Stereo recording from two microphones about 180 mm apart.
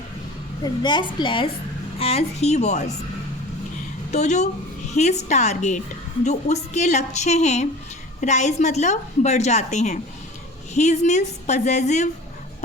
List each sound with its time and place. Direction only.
0.6 s a woman's voice: 25° left (ahead or behind)
4.1 s a woman's voice: 40° left (ahead or behind)